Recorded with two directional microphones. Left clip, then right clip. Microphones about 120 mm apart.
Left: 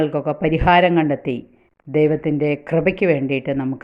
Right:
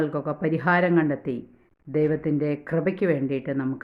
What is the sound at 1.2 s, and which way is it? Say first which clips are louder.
Speech: left 6 dB; 30° right (ahead or behind).